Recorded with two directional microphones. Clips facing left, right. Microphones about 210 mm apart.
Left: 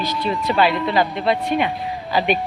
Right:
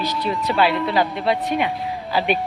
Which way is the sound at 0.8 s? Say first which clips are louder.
Left 1 dB; centre (ahead or behind).